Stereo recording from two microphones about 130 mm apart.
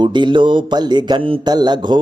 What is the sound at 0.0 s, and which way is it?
Mantra, 35° right (ahead or behind).